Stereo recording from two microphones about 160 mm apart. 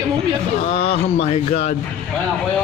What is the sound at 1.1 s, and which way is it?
Speech, 40° left (ahead or behind).